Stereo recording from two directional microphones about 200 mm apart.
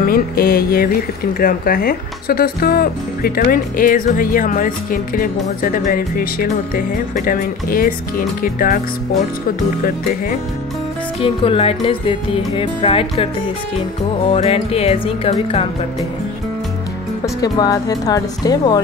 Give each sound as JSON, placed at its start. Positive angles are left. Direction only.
{"t": 0.0, "sound": "speech", "side_deg": 45}
{"t": 9.8, "sound": "speech", "side_deg": 45}
{"t": 11.1, "sound": "music", "side_deg": 25}
{"t": 17.4, "sound": "music", "side_deg": 20}